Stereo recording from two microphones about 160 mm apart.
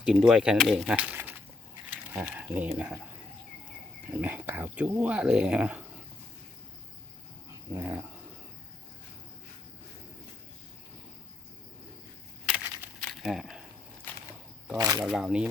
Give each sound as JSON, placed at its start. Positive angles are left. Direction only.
{"t": 0.0, "sound": "speech", "side_deg": -5}
{"t": 4.1, "sound": "speech", "side_deg": -10}
{"t": 7.7, "sound": "speech", "side_deg": -10}
{"t": 12.5, "sound": "crushing", "side_deg": -5}
{"t": 13.0, "sound": "a sound", "side_deg": 0}
{"t": 14.8, "sound": "speech", "side_deg": -25}
{"t": 15.0, "sound": "speech", "side_deg": -5}